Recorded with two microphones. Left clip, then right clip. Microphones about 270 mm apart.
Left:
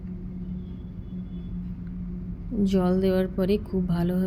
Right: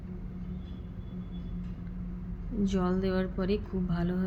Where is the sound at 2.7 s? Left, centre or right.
Centre.